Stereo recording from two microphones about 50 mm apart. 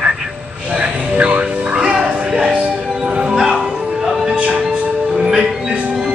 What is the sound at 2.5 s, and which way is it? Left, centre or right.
Music, right.